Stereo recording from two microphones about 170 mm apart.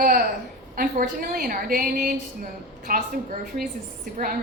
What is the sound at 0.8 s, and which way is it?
A woman's voice, 55° right (ahead or behind).